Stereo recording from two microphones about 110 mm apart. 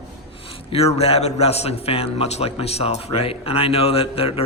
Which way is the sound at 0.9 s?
65° left (ahead or behind).